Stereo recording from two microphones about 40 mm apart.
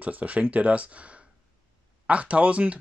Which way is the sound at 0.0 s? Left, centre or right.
Right.